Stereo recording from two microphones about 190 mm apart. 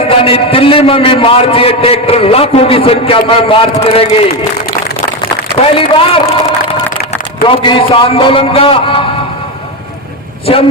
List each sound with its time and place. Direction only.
0.3 s a man's voice: 30° left (ahead or behind)
5.7 s a man's voice: 30° left (ahead or behind)
7.4 s a man's voice: 25° left (ahead or behind)